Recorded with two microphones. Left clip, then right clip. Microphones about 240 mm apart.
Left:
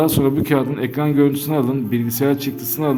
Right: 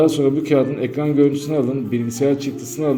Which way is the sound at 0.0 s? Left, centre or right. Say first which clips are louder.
Right 1 dB; left.